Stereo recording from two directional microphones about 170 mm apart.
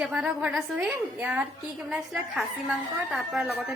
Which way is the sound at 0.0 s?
5° right (ahead or behind).